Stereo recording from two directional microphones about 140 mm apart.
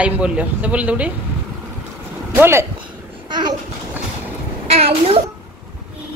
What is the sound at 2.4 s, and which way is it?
Speech, 20° right (ahead or behind).